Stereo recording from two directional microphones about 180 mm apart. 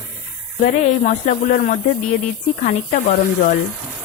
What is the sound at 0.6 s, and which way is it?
Speech, 40° left (ahead or behind).